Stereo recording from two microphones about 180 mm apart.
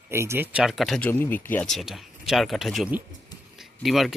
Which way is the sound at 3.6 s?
Centre (ahead or behind).